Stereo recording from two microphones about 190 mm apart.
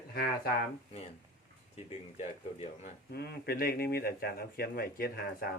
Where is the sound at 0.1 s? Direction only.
55° left (ahead or behind).